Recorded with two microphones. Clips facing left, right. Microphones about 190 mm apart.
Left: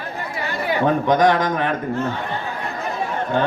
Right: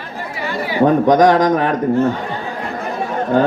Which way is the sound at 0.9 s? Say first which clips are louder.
Right 5 dB; 40° right (ahead or behind).